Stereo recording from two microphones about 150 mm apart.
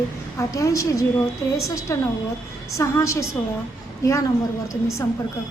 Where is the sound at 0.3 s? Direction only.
20° left (ahead or behind).